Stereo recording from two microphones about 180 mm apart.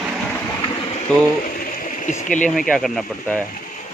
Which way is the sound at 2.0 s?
45° left (ahead or behind).